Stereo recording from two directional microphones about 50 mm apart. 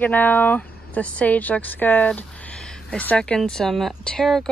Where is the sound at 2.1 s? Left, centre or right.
Left.